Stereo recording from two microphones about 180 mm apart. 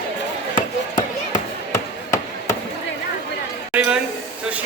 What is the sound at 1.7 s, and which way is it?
Chop, 15° left (ahead or behind).